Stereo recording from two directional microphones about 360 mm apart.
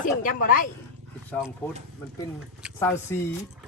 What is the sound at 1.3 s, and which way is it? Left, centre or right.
Speech, centre.